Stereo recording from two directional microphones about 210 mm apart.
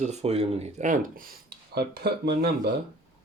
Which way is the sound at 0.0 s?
30° right (ahead or behind).